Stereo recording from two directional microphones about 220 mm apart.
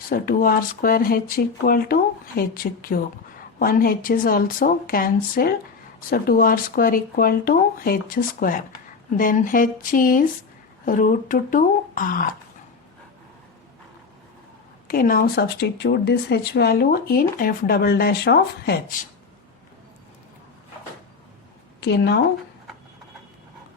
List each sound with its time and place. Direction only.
0.1 s speech: 40° left (ahead or behind)
14.8 s speech: 40° left (ahead or behind)
21.8 s speech: 50° left (ahead or behind)